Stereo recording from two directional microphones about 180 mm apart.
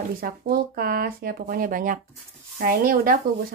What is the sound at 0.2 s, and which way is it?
Speech, 55° right (ahead or behind).